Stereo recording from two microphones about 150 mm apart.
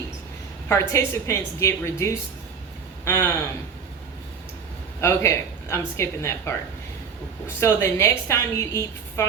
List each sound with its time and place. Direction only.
0.7 s a woman's voice: 20° left (ahead or behind)
4.9 s a woman's voice: 20° left (ahead or behind)